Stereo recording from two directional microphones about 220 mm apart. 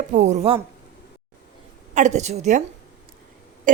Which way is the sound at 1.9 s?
30° right (ahead or behind).